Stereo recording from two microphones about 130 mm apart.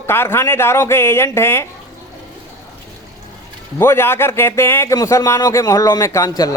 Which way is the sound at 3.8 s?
20° left (ahead or behind).